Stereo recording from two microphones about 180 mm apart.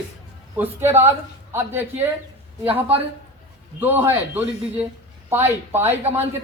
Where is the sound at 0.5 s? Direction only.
10° right (ahead or behind).